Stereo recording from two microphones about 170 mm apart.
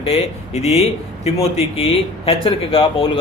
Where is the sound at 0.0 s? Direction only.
35° left (ahead or behind).